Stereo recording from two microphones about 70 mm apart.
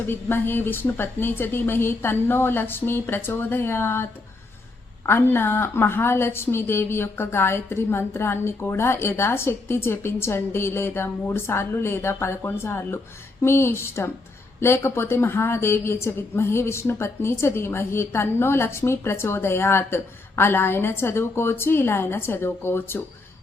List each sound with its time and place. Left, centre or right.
0.1 s a woman's voice: left